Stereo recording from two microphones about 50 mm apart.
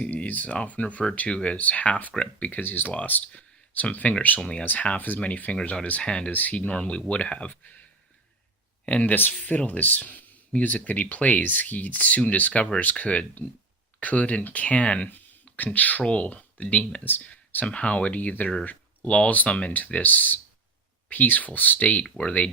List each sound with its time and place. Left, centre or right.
0.0 s speech: left
2.6 s speech: left
2.9 s speech: left
3.3 s a sound: left
4.6 s speech: left
6.0 s speech: centre
6.3 s speech: left
8.9 s speech: left
9.3 s speech: left
17.0 s speech: left
17.7 s speech: left